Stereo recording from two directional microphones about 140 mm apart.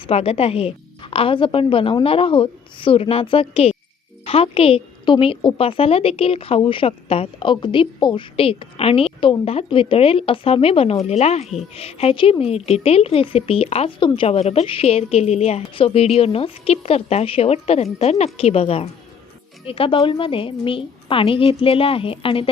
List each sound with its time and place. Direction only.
0.1 s a woman's voice: 45° left (ahead or behind)